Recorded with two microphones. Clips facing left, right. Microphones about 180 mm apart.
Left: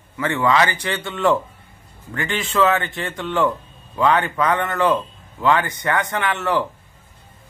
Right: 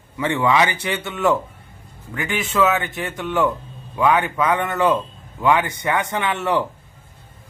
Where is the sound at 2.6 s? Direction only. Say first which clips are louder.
Left 1 dB; 5° right (ahead or behind).